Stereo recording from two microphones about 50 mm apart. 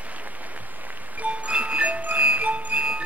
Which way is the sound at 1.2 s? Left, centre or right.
Right.